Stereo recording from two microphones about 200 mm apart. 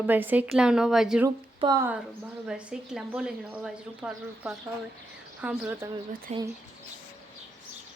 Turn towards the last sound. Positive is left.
turn(degrees=-35)  # may be behind; listen again after turning